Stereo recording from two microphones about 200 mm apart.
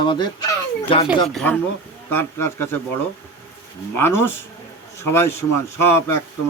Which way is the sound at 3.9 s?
10° left (ahead or behind).